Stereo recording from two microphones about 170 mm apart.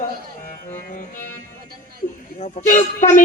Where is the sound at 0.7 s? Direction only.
50° left (ahead or behind).